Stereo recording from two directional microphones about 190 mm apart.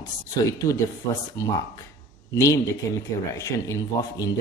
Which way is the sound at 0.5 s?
15° left (ahead or behind).